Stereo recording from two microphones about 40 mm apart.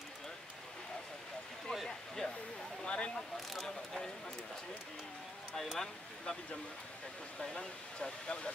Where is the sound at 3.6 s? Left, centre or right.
Centre.